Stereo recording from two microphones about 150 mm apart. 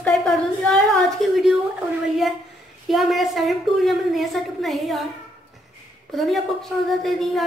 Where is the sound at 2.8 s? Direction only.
Centre (ahead or behind).